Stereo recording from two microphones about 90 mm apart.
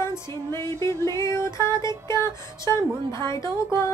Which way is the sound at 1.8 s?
55° right (ahead or behind).